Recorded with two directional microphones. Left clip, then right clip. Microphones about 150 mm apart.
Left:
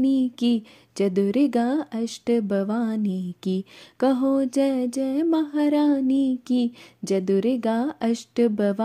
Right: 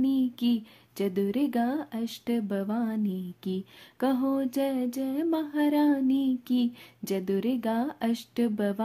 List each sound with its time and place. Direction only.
0.0 s speech: 35° left (ahead or behind)